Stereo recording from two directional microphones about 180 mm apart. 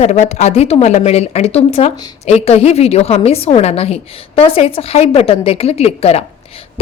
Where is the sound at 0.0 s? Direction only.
40° left (ahead or behind).